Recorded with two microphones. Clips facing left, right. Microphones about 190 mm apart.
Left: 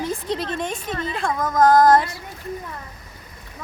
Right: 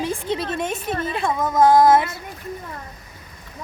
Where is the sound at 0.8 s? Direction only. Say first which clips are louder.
Right 2 dB; 55° right (ahead or behind).